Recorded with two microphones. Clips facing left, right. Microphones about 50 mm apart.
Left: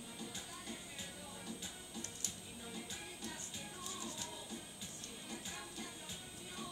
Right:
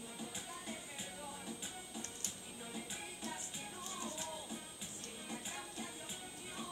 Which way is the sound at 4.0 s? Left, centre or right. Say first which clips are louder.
Right 4 dB; right.